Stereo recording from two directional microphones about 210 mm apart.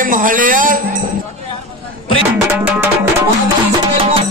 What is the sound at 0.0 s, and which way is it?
Speech, 40° right (ahead or behind).